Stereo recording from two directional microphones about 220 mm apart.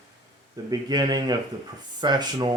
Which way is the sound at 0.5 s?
15° right (ahead or behind).